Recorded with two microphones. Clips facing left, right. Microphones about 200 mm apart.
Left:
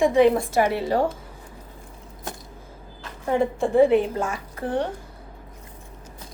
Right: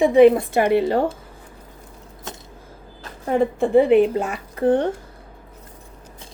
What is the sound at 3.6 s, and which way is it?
Speech, 65° right (ahead or behind).